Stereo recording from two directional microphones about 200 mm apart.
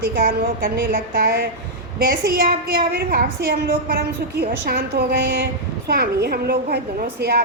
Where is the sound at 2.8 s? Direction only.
50° right (ahead or behind).